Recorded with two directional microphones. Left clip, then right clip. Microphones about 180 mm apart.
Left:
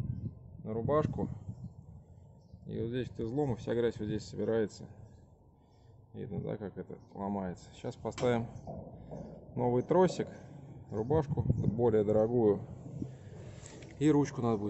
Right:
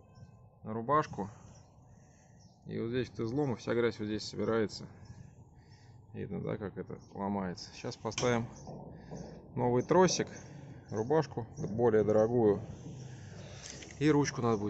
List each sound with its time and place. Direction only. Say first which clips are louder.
0.7 s speech: right 1 dB; 10° left (ahead or behind)
2.6 s speech: right 1 dB; 10° left (ahead or behind)
6.1 s speech: right 1 dB; 5° left (ahead or behind)
13.4 s a sound: right 5 dB; 20° left (ahead or behind)
13.9 s speech: even; 15° left (ahead or behind)